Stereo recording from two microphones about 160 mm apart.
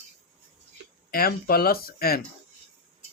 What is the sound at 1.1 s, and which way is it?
Speech, 70° left (ahead or behind).